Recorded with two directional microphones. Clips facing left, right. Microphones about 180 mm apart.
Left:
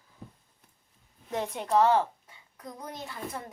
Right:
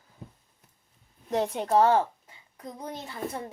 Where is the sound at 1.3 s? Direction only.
35° right (ahead or behind).